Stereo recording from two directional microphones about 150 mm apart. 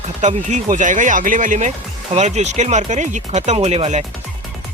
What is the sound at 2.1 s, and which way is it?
Speech, 50° right (ahead or behind).